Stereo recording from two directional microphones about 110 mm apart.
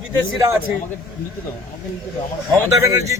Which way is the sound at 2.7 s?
30° right (ahead or behind).